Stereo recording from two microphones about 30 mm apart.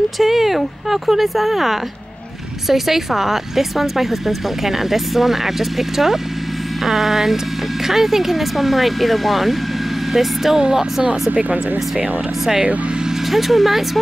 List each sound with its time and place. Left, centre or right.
0.2 s speech: centre
13.3 s speech: centre